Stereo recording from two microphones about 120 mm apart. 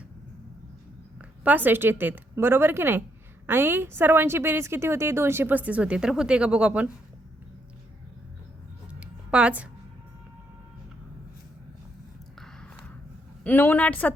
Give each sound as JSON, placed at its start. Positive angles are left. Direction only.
{"t": 1.5, "sound": "a woman's voice", "side_deg": -15}
{"t": 8.9, "sound": "a sound", "side_deg": -10}
{"t": 13.4, "sound": "a man's voice", "side_deg": 15}